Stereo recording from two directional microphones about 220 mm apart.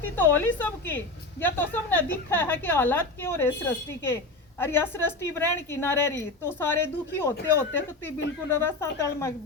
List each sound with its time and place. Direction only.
0.0 s a woman's voice: 10° left (ahead or behind)